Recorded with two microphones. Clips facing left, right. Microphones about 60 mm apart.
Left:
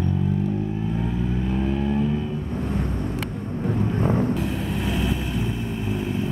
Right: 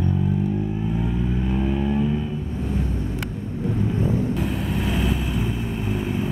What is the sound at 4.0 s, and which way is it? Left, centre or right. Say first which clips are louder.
Vehicle: left 3 dB; left.